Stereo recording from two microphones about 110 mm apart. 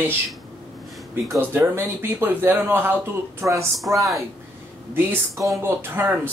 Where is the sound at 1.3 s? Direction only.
20° right (ahead or behind).